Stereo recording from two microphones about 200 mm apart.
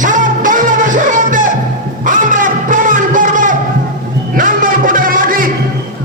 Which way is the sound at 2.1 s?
40° right (ahead or behind).